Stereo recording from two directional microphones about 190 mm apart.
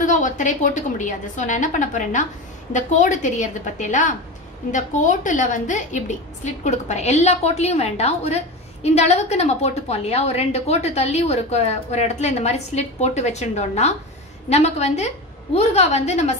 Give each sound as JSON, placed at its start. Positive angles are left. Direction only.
{"t": 0.0, "sound": "a woman's voice", "side_deg": 40}